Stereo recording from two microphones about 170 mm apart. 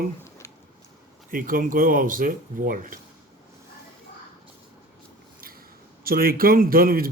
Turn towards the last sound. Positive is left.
turn(degrees=-60)  # may be behind; listen again after turning